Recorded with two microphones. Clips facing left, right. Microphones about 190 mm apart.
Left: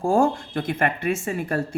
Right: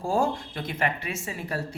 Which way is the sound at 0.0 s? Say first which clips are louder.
Left 6 dB; 50° left (ahead or behind).